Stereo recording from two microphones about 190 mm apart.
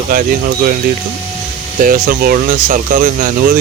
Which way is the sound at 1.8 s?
50° right (ahead or behind).